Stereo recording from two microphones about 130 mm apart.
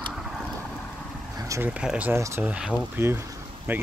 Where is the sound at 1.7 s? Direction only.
10° right (ahead or behind).